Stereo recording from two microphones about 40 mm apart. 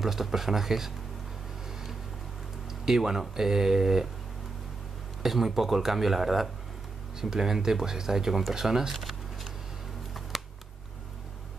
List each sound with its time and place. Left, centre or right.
0.0 s speech: centre
2.8 s speech: centre
5.2 s speech: centre
8.9 s shuffling cards: centre
10.3 s a sound: centre